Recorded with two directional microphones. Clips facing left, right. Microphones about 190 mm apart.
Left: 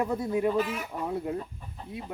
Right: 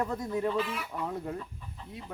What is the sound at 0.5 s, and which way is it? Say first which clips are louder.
Speech: left 3 dB; 45° left (ahead or behind).